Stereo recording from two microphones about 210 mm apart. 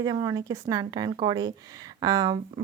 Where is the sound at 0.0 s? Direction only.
20° right (ahead or behind).